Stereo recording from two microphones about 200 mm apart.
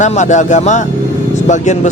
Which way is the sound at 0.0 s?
35° left (ahead or behind).